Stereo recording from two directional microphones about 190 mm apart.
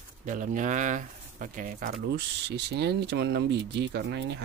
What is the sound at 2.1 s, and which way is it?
Speech, 60° right (ahead or behind).